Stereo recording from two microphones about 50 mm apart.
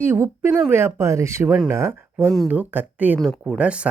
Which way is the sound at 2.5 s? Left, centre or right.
Right.